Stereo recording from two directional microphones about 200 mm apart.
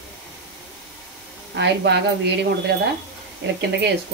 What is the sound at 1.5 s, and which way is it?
Speech, 60° right (ahead or behind).